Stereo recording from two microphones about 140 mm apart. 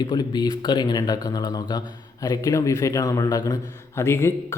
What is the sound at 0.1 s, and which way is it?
A man's voice, 30° left (ahead or behind).